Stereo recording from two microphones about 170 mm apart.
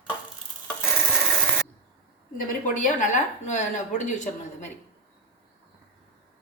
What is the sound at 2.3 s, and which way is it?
Speech, 50° left (ahead or behind).